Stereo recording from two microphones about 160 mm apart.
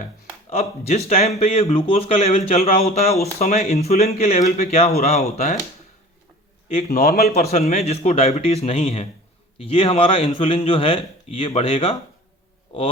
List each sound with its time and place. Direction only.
0.5 s a man's voice: 40° left (ahead or behind)
2.5 s a man's voice: 50° left (ahead or behind)
6.7 s a man's voice: 35° left (ahead or behind)
6.9 s a man's voice: 70° left (ahead or behind)
7.7 s a man's voice: 40° left (ahead or behind)